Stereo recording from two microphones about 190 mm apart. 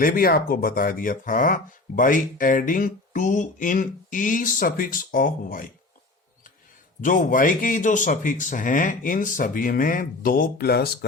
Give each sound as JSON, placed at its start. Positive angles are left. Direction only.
{"t": 0.0, "sound": "speech", "side_deg": 50}
{"t": 7.0, "sound": "speech", "side_deg": 45}